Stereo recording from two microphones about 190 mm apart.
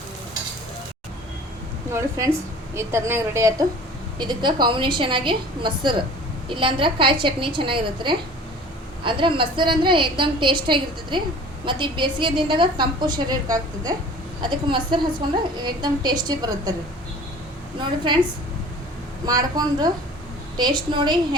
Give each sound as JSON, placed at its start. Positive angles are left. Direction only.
{"t": 1.9, "sound": "a woman's voice", "side_deg": -15}
{"t": 19.2, "sound": "a woman's voice", "side_deg": -20}